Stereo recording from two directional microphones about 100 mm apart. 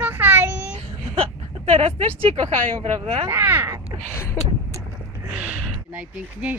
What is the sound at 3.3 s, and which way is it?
Crow, 25° right (ahead or behind).